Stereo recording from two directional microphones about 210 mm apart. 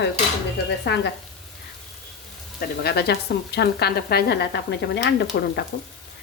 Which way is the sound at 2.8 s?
50° left (ahead or behind).